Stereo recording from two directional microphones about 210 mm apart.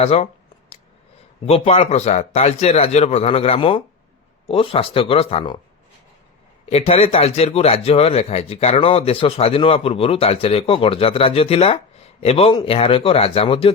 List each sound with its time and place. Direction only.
0.0 s a man's voice: 30° left (ahead or behind)
1.5 s a man's voice: 30° left (ahead or behind)
6.7 s a man's voice: 30° left (ahead or behind)